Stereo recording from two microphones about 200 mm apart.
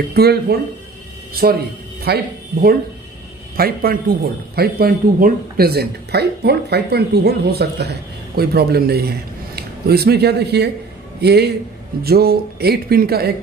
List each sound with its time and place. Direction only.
0.1 s a man's voice: 50° right (ahead or behind)
3.5 s a man's voice: 50° right (ahead or behind)